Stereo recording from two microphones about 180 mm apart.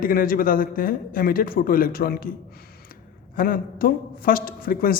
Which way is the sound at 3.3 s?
50° left (ahead or behind).